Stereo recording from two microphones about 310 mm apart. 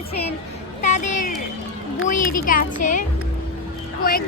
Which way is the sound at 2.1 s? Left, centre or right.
Left.